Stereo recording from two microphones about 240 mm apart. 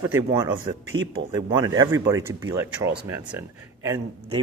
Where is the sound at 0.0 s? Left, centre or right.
Centre.